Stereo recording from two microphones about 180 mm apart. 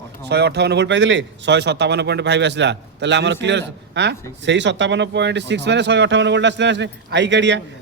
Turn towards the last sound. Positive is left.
turn(degrees=-80)